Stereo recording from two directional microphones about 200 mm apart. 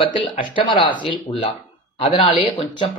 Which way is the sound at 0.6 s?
25° left (ahead or behind).